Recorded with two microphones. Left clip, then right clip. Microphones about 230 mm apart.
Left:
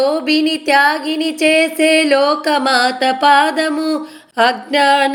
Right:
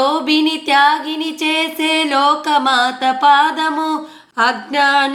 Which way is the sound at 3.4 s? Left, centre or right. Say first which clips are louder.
Even; right.